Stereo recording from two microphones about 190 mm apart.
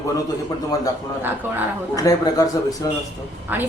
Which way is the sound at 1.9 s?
20° left (ahead or behind).